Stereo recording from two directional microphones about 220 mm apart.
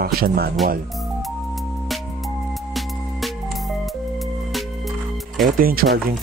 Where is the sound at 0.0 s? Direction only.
45° right (ahead or behind).